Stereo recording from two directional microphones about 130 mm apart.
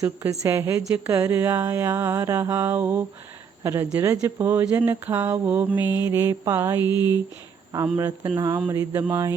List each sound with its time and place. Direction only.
0.3 s a woman's voice: 20° right (ahead or behind)
4.4 s mantra: 15° right (ahead or behind)
6.1 s a woman's voice: 20° right (ahead or behind)
6.8 s speech: 30° left (ahead or behind)
7.7 s a woman's voice: 25° right (ahead or behind)